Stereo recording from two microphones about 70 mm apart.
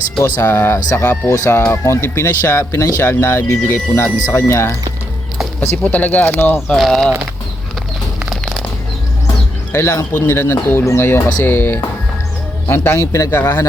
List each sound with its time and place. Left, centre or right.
0.3 s speech: left
1.0 s speech: left
5.5 s speech: left
6.7 s speech: centre
9.7 s speech: left